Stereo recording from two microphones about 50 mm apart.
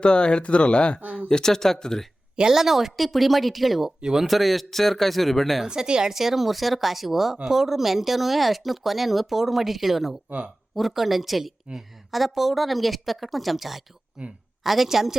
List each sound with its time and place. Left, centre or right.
0.0 s speech: centre
2.3 s a woman's voice: centre
4.3 s a woman's voice: centre
5.6 s a woman's voice: centre
14.2 s a woman's voice: centre
14.6 s a woman's voice: centre